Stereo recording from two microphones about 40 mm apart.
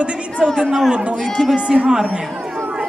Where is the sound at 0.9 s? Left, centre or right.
Right.